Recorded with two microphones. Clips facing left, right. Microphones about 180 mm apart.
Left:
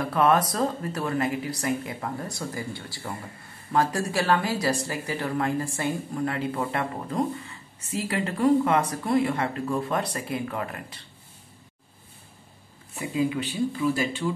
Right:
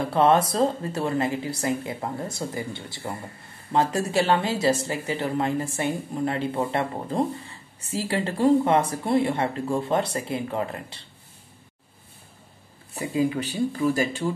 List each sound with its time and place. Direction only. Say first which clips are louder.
0.0 s a woman's voice: right 2 dB; 25° right (ahead or behind)
12.9 s speech: right 2 dB; 35° right (ahead or behind)